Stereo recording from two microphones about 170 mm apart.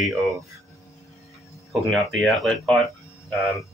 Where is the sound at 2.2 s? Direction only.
Centre (ahead or behind).